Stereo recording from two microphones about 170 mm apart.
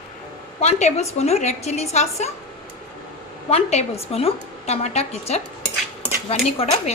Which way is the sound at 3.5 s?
40° left (ahead or behind).